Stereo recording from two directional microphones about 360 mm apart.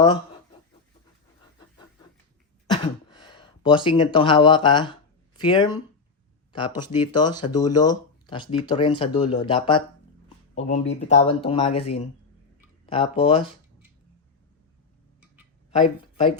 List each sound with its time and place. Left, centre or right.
2.6 s a sound: centre
5.4 s speech: centre
15.7 s speech: centre